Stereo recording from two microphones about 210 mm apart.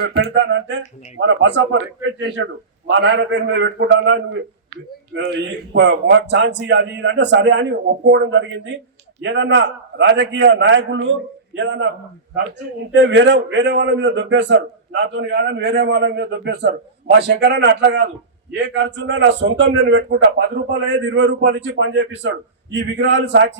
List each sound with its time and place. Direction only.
0.0 s a man's voice: 55° right (ahead or behind)
12.9 s a man's voice: 60° right (ahead or behind)